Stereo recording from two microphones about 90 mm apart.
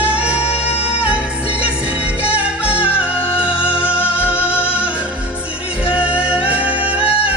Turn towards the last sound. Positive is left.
turn(degrees=-15)  # may be behind; listen again after turning